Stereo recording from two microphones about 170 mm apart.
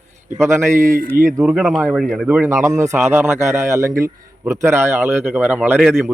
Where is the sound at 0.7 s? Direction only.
50° right (ahead or behind).